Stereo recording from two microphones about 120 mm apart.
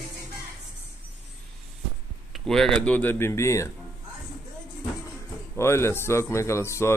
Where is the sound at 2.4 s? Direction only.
5° left (ahead or behind); by 3.7 s 25° left (ahead or behind).